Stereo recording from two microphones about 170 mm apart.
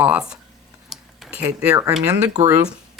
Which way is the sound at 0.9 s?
Centre (ahead or behind).